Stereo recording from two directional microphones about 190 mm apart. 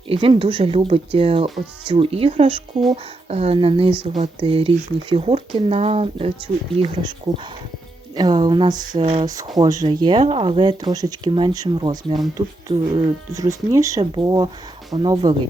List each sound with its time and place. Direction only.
0.1 s speech: 30° right (ahead or behind)
8.1 s speech: 20° right (ahead or behind)
9.0 s speech: 35° right (ahead or behind)
9.2 s speech: 20° right (ahead or behind)
13.3 s speech: 15° right (ahead or behind)